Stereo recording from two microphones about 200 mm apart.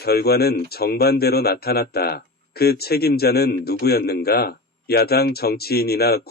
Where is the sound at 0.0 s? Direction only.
50° left (ahead or behind).